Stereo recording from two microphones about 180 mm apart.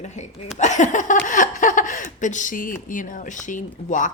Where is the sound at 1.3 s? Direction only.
45° left (ahead or behind).